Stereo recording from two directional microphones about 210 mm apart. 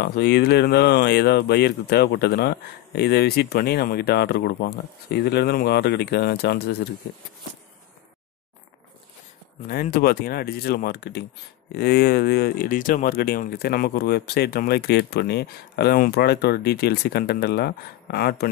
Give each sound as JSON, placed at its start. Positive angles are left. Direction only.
{"t": 0.0, "sound": "speech", "side_deg": 50}
{"t": 9.7, "sound": "speech", "side_deg": 45}